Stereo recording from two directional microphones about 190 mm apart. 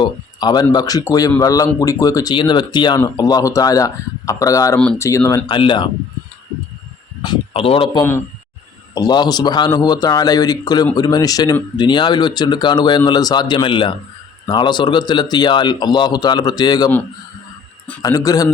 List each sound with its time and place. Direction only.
0.0 s speech: 20° left (ahead or behind)
7.2 s a man's voice: 25° left (ahead or behind)
18.0 s speech: 20° left (ahead or behind)